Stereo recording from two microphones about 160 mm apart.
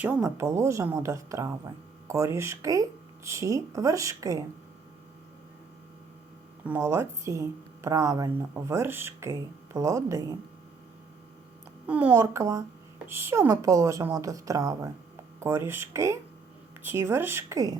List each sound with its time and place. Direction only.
0.0 s speech: 15° right (ahead or behind)
6.7 s speech: 15° right (ahead or behind)
11.9 s speech: 10° right (ahead or behind)